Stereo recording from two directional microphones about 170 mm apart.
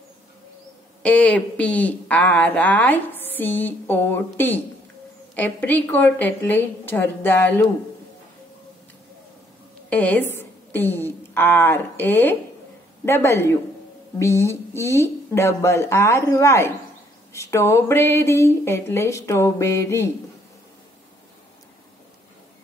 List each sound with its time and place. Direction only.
1.0 s speech: 5° left (ahead or behind)
9.8 s a woman's voice: 10° left (ahead or behind)